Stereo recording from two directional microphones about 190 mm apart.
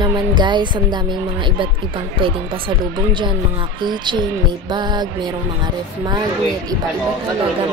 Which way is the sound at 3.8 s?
25° right (ahead or behind).